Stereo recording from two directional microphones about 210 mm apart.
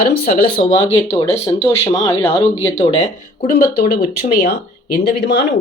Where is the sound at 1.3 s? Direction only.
15° left (ahead or behind).